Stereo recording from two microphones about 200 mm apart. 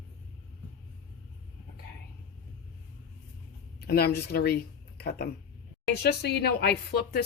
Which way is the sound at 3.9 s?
50° left (ahead or behind).